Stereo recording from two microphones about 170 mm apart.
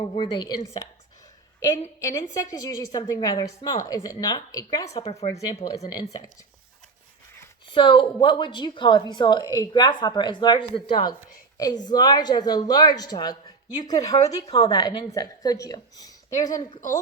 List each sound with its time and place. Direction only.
0.0 s speech: 30° left (ahead or behind)
0.4 s a woman's voice: 20° left (ahead or behind)
2.0 s a woman's voice: 20° left (ahead or behind)
5.5 s speech: 40° left (ahead or behind)
7.7 s a woman's voice: 30° left (ahead or behind)